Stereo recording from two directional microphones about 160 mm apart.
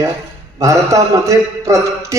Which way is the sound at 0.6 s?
20° right (ahead or behind).